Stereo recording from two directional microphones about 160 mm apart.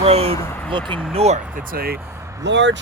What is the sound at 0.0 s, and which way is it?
Speech, 40° right (ahead or behind).